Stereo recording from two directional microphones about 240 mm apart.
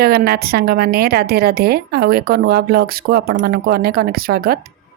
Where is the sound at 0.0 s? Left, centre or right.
Right.